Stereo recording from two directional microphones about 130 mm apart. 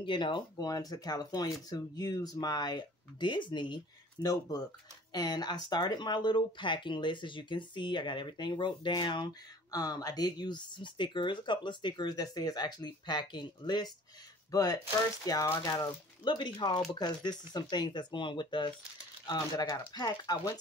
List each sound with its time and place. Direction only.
0.0 s speech: 40° left (ahead or behind)